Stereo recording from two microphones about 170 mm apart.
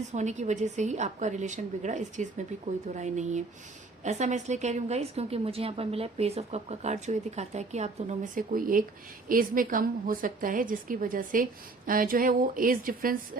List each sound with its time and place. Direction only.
0.1 s a woman's voice: 45° right (ahead or behind)